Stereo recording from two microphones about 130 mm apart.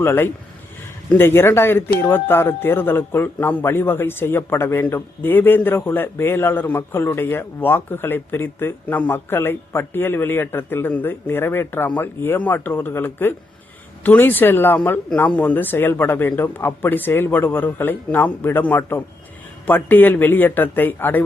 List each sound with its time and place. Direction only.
0.0 s speech: 20° left (ahead or behind)